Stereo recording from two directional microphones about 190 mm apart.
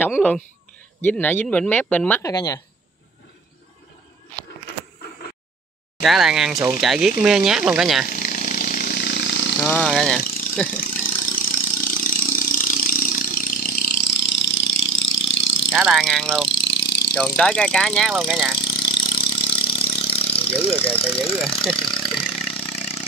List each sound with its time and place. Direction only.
0.0 s speech: 10° left (ahead or behind)
6.0 s speech: centre (ahead or behind)
8.1 s vehicle: 45° left (ahead or behind); by 9.6 s 65° left (ahead or behind)
9.6 s speech: 5° left (ahead or behind)
10.8 s engine: 45° left (ahead or behind); by 15.7 s 75° left (ahead or behind)
15.7 s speech: centre (ahead or behind)
16.5 s vehicle: 65° left (ahead or behind)
17.4 s speech: 5° left (ahead or behind)
18.6 s vehicle: 25° left (ahead or behind)
21.0 s speech: 30° left (ahead or behind)
22.5 s vehicle: 30° left (ahead or behind)